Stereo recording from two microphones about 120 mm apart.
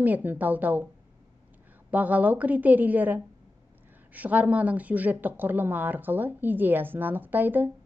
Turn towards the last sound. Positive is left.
turn(degrees=-15)  # may be behind; listen again after turning